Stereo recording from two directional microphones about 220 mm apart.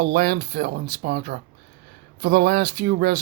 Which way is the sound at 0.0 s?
45° right (ahead or behind).